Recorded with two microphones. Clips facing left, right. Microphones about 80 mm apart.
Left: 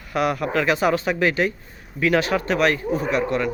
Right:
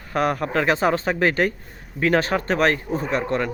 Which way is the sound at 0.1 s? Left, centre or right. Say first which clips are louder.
Even; right.